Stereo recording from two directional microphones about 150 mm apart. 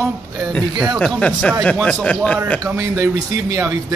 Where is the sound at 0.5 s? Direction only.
5° left (ahead or behind).